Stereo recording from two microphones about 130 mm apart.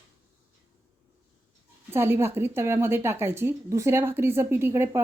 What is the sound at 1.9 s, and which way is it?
A woman's voice, 20° right (ahead or behind).